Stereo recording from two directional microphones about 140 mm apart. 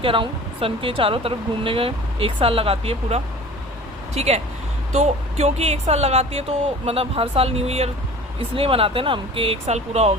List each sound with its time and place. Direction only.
0.0 s speech: 40° right (ahead or behind)